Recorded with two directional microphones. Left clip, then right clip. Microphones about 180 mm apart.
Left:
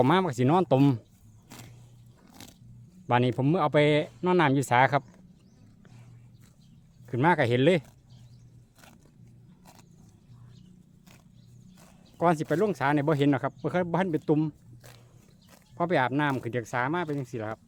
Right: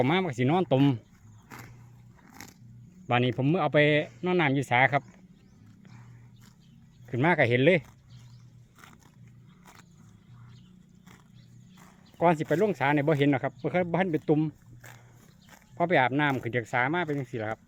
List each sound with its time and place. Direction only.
0.0 s speech: 25° left (ahead or behind)
2.2 s dog: 35° left (ahead or behind)
3.1 s speech: 20° left (ahead or behind)
7.1 s speech: 15° left (ahead or behind)
12.1 s speech: 10° left (ahead or behind)